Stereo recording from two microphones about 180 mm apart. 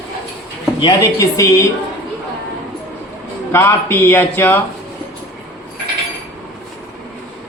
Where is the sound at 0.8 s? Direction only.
20° left (ahead or behind).